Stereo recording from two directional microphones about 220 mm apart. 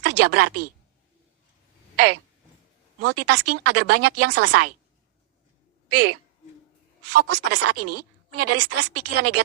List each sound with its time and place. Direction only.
0.0 s speech: 90° right
3.0 s speech: 90° right
5.9 s speech: 90° right